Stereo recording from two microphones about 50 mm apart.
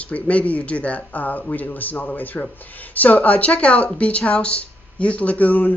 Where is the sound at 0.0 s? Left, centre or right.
Left.